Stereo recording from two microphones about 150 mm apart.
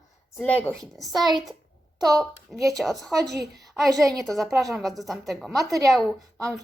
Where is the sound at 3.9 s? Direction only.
25° right (ahead or behind).